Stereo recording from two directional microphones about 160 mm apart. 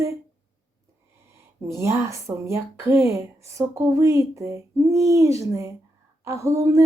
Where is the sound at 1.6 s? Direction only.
15° right (ahead or behind).